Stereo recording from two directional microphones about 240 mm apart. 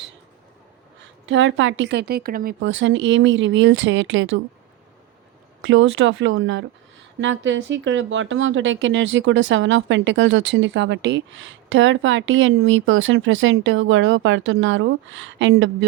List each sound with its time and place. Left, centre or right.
1.3 s speech: right
5.6 s speech: right